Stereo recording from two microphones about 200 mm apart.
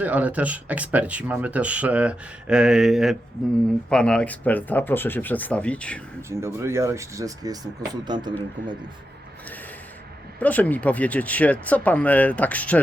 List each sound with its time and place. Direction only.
0.0 s speech: 5° right (ahead or behind)
6.2 s speech: 15° right (ahead or behind)
10.4 s speech: 10° left (ahead or behind)